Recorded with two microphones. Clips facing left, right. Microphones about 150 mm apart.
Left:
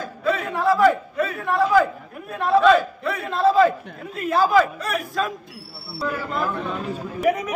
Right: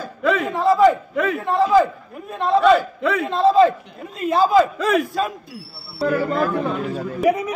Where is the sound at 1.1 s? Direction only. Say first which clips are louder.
Right 4 dB; 90° right.